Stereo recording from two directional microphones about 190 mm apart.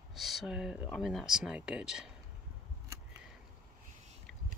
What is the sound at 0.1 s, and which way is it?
Speech, centre (ahead or behind).